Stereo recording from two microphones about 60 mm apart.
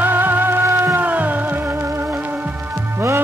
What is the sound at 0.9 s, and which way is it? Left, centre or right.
Music, right.